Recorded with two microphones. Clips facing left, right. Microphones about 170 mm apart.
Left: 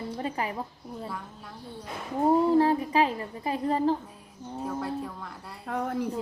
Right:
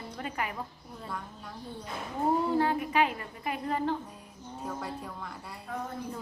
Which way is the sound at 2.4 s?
30° left (ahead or behind).